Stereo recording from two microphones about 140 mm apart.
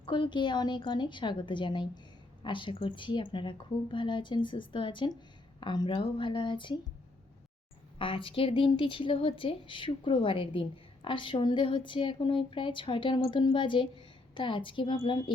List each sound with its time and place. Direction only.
0.0 s a woman's voice: 35° left (ahead or behind)
7.9 s a woman's voice: 40° left (ahead or behind)